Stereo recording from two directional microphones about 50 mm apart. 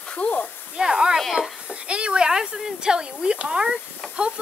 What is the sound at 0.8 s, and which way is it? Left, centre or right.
Speech, centre.